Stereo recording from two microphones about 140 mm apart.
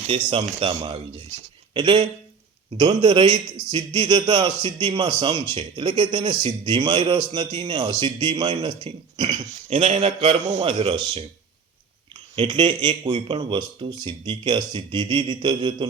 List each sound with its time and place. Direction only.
0.1 s a man's voice: 40° right (ahead or behind)
9.6 s a man's voice: 50° right (ahead or behind)
12.4 s a man's voice: 35° right (ahead or behind)